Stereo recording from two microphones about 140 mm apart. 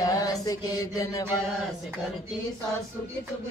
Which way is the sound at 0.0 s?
25° left (ahead or behind).